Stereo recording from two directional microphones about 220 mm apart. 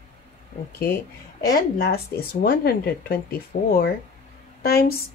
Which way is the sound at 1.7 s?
45° left (ahead or behind).